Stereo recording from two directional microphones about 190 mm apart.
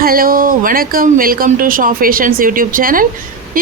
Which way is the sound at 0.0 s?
50° right (ahead or behind).